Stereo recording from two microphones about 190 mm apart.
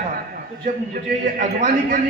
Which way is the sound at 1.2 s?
45° right (ahead or behind).